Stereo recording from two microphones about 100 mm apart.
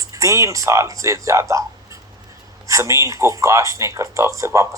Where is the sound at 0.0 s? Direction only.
30° right (ahead or behind).